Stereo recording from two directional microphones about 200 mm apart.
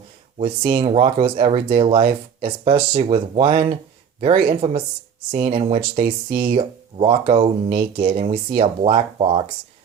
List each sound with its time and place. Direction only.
0.3 s speech: 25° right (ahead or behind)